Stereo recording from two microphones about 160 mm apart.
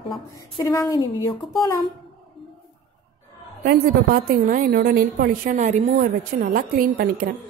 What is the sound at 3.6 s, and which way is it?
A woman's voice, 75° right (ahead or behind).